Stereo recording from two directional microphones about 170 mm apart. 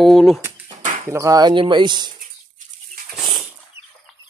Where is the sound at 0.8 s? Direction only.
50° right (ahead or behind).